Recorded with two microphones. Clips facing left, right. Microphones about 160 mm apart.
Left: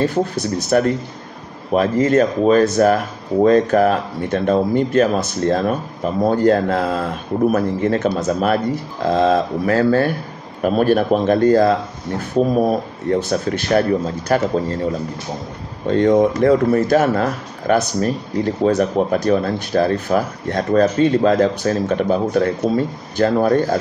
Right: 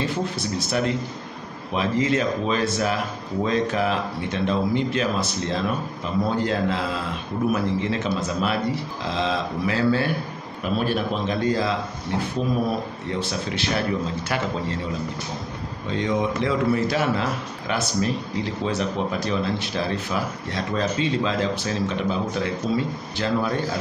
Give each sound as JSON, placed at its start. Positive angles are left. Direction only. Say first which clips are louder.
{"t": 0.0, "sound": "speech", "louder": "left 7 dB", "side_deg": 45}